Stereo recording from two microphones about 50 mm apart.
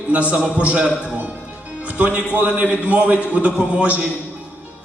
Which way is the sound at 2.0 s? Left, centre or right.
Right.